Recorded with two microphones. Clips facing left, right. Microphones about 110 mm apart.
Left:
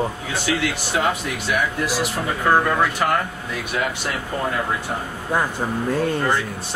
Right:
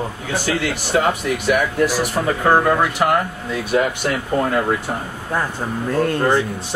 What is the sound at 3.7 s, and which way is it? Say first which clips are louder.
Speech: right 7 dB; 35° right (ahead or behind).